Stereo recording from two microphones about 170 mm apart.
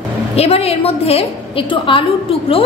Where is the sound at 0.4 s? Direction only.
35° left (ahead or behind).